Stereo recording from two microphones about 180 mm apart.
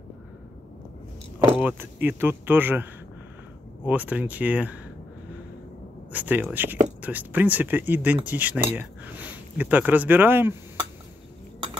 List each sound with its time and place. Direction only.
1.5 s speech: 10° right (ahead or behind)
6.1 s speech: 10° right (ahead or behind)